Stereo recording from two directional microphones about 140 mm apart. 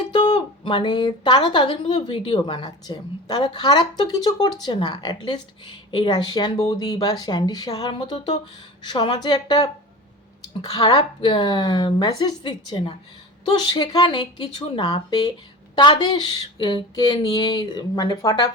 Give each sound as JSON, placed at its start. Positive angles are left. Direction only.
{"t": 0.1, "sound": "a woman's voice", "side_deg": 30}